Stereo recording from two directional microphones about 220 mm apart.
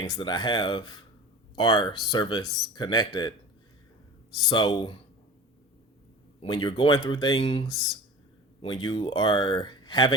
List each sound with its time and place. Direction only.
0.0 s speech: 20° left (ahead or behind)
4.4 s speech: 20° left (ahead or behind)
6.4 s speech: 20° left (ahead or behind)